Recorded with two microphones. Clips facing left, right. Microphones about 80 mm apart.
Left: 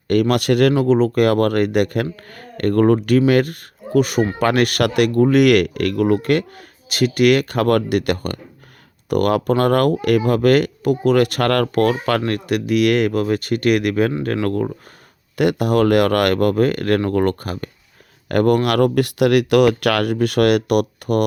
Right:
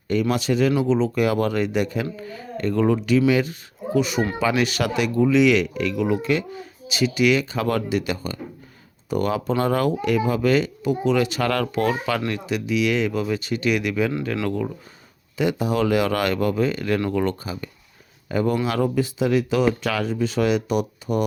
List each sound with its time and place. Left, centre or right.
0.1 s speech: left
0.8 s speech: left
15.4 s speech: left
18.3 s speech: left